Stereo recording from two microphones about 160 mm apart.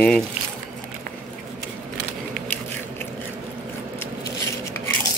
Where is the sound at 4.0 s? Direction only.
15° left (ahead or behind).